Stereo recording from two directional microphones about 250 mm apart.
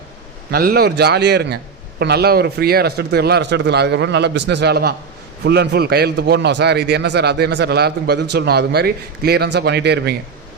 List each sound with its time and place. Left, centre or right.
0.5 s a man's voice: right